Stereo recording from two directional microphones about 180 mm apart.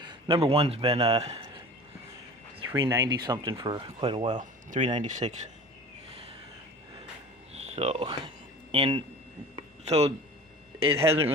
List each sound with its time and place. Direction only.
0.0 s a man's voice: 30° right (ahead or behind)
2.6 s speech: 20° right (ahead or behind)
4.4 s speech: 45° right (ahead or behind)
7.5 s a sound: 35° right (ahead or behind)
8.7 s speech: 30° right (ahead or behind)
9.6 s a sound: 35° right (ahead or behind)
10.9 s speech: 35° right (ahead or behind)